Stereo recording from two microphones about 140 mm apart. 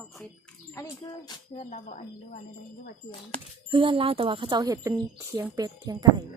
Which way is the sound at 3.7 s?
35° right (ahead or behind).